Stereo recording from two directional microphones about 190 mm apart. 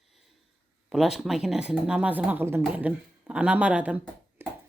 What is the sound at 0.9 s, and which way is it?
Speech, centre (ahead or behind).